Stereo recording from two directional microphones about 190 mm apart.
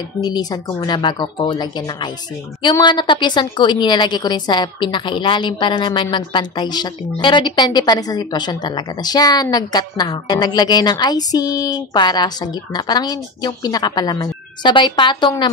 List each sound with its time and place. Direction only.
0.2 s a woman's voice: 20° left (ahead or behind)